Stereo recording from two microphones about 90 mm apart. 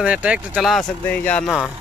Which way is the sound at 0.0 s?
15° right (ahead or behind).